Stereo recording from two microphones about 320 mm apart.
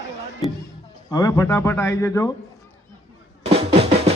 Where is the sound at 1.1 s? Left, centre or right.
Centre.